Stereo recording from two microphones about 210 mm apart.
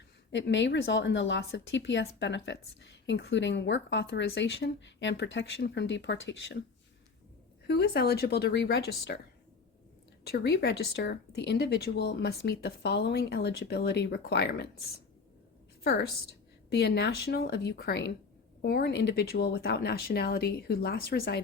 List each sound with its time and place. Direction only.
0.3 s a woman's voice: 55° left (ahead or behind)
7.7 s speech: 50° left (ahead or behind)
10.2 s speech: 50° left (ahead or behind)
16.6 s speech: 50° left (ahead or behind)